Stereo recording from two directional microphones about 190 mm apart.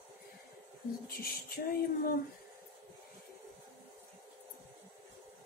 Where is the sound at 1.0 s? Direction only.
50° left (ahead or behind).